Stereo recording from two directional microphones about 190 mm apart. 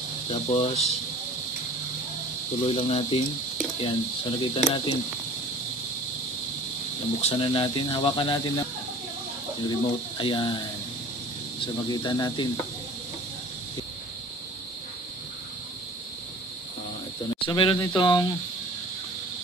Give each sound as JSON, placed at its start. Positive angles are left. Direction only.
{"t": 0.3, "sound": "speech", "side_deg": 30}
{"t": 2.6, "sound": "speech", "side_deg": 30}
{"t": 4.4, "sound": "speech", "side_deg": 25}
{"t": 7.2, "sound": "speech", "side_deg": 30}
{"t": 9.7, "sound": "speech", "side_deg": 25}
{"t": 11.6, "sound": "speech", "side_deg": 25}
{"t": 17.4, "sound": "speech", "side_deg": 25}